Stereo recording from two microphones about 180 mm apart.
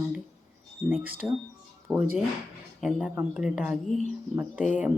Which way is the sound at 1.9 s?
Centre (ahead or behind).